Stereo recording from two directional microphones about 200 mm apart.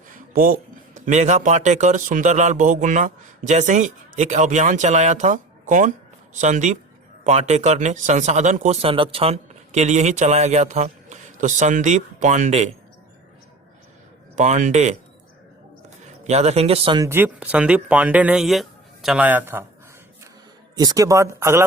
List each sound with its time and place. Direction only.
0.1 s a man's voice: 45° right (ahead or behind)
14.3 s speech: 35° right (ahead or behind)
16.2 s speech: 35° right (ahead or behind)
17.1 s speech: 10° right (ahead or behind)
20.7 s speech: 20° right (ahead or behind)